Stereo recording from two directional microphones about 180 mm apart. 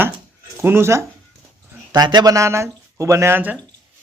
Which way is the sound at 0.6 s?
15° right (ahead or behind).